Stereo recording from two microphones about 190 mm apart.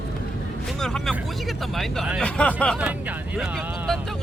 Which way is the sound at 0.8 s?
Centre (ahead or behind).